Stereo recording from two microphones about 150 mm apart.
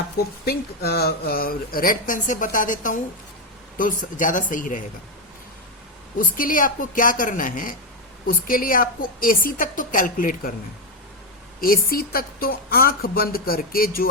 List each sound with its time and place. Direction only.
0.4 s a woman's voice: 90° left; by 4.8 s 60° left (ahead or behind)
6.1 s a woman's voice: 65° left (ahead or behind)
11.6 s a woman's voice: 75° left (ahead or behind)